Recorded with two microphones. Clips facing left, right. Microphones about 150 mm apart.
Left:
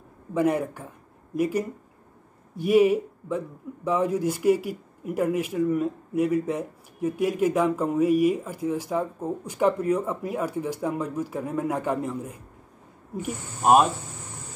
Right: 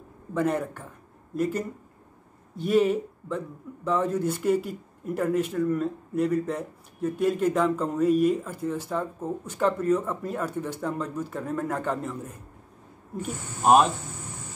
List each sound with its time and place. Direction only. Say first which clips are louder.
0.3 s a man's voice: left 3 dB; 10° left (ahead or behind)